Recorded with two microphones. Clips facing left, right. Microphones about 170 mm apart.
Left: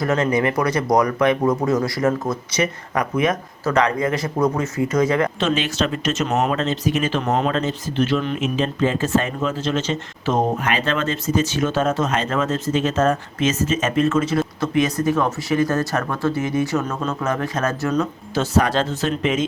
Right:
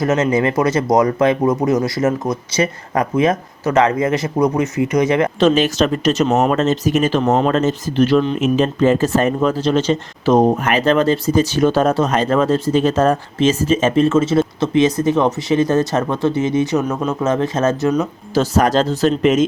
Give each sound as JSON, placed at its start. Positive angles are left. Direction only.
{"t": 0.0, "sound": "speech", "side_deg": -20}
{"t": 5.4, "sound": "speech", "side_deg": -40}
{"t": 18.3, "sound": "speech", "side_deg": -40}